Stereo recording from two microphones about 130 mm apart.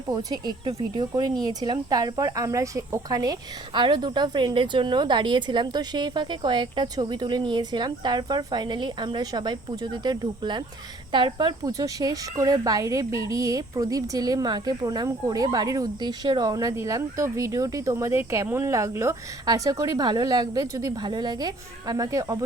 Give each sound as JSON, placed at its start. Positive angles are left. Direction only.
{"t": 0.1, "sound": "a woman's voice", "side_deg": -30}